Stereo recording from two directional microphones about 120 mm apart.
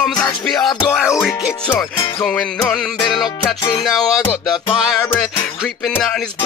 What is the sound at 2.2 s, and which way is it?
Speech, 5° left (ahead or behind).